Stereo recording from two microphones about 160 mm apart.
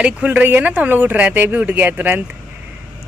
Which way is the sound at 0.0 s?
10° right (ahead or behind).